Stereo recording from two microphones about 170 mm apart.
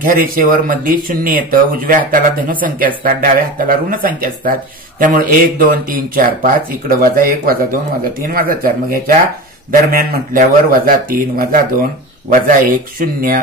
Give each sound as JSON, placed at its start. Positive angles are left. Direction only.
{"t": 0.0, "sound": "speech", "side_deg": -55}